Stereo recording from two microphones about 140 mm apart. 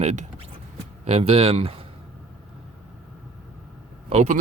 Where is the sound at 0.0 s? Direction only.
50° right (ahead or behind).